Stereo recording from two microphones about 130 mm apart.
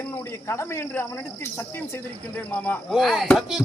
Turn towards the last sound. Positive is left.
turn(degrees=-5)  # may be behind; listen again after turning